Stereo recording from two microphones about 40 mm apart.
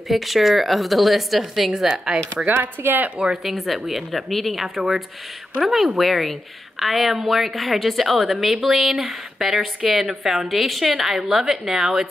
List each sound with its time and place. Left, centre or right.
0.1 s a woman's voice: centre
2.3 s speech: right
3.4 s a woman's voice: centre
4.6 s a woman's voice: centre